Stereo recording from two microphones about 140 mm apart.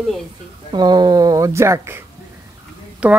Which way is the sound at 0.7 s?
30° right (ahead or behind).